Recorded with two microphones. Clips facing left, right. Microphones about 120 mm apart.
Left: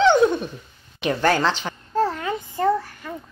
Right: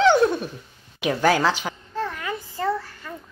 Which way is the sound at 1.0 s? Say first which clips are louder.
Even; 5° right (ahead or behind).